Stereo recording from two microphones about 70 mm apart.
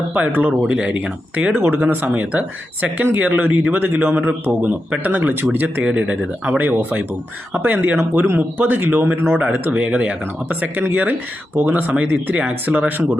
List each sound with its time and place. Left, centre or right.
0.1 s a man's voice: right
1.6 s a man's voice: right
5.8 s a man's voice: centre
9.8 s a man's voice: centre